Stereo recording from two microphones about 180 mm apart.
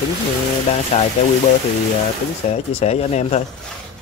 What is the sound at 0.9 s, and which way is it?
Speech, 35° left (ahead or behind).